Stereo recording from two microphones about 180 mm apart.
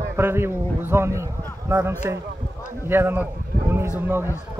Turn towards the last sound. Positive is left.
turn(degrees=-10)  # may be behind; listen again after turning